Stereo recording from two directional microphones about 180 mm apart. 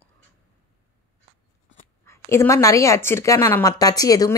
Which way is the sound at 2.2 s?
15° left (ahead or behind).